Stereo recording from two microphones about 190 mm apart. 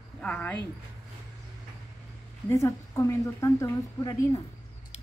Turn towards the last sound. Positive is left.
turn(degrees=20)  # may be behind; listen again after turning